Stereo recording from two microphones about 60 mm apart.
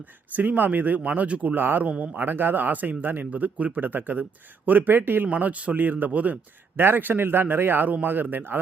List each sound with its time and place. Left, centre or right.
0.0 s speech: right